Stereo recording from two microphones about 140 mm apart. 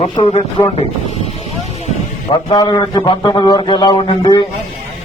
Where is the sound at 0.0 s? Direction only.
45° left (ahead or behind).